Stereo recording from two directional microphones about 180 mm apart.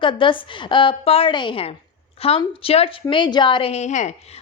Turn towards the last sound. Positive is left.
turn(degrees=40)  # may be behind; listen again after turning